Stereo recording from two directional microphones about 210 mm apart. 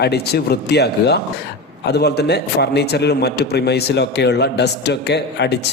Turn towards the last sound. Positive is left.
turn(degrees=55)  # may be behind; listen again after turning